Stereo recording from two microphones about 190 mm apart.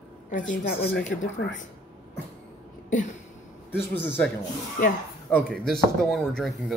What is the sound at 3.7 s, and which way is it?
A man's voice, 10° left (ahead or behind).